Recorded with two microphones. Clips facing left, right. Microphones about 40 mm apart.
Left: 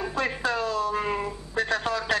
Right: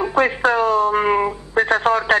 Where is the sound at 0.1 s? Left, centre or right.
Right.